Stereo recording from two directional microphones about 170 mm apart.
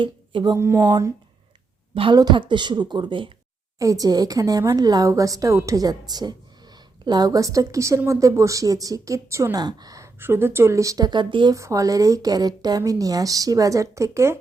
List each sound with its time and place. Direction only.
0.0 s speech: 30° right (ahead or behind)
0.5 s a woman's voice: 15° right (ahead or behind)